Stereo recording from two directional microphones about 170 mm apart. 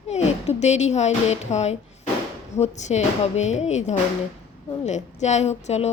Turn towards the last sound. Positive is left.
turn(degrees=40)  # may be behind; listen again after turning